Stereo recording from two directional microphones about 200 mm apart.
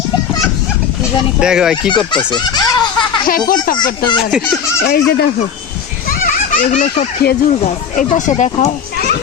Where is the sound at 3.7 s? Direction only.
25° left (ahead or behind).